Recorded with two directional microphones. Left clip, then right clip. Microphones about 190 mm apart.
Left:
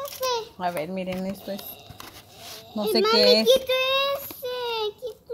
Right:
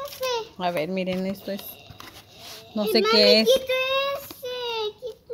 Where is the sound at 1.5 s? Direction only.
30° left (ahead or behind).